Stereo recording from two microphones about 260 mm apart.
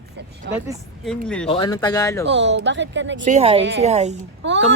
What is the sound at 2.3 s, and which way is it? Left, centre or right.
Speech, right.